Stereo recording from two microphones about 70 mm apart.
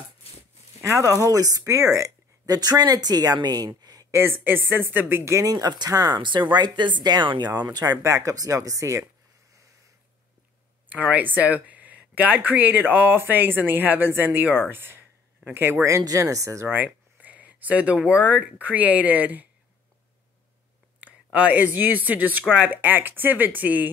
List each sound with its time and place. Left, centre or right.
0.7 s speech: right
4.1 s speech: right
5.5 s speech: right
5.9 s speech: right
6.1 s speech: right
7.8 s speech: right
10.9 s speech: right
14.7 s a sound: right
16.0 s speech: right
16.6 s speech: right
21.0 s speech: right